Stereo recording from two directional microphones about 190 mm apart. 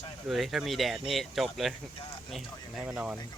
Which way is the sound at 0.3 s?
Centre (ahead or behind).